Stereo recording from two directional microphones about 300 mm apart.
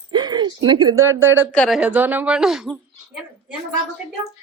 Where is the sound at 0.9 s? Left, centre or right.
Right.